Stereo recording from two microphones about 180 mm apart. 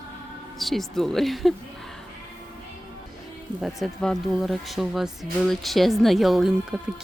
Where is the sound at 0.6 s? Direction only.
Centre (ahead or behind).